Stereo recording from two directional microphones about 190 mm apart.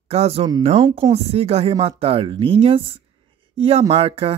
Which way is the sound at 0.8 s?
20° right (ahead or behind).